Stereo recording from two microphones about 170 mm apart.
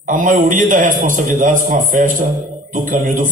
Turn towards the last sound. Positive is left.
turn(degrees=-50)  # may be behind; listen again after turning